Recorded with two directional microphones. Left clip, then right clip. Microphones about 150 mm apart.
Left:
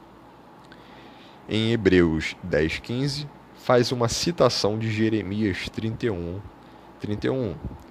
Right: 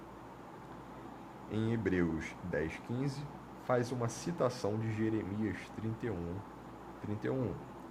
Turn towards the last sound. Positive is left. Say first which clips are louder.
# left 11 dB
turn(degrees=55)  # may be behind; listen again after turning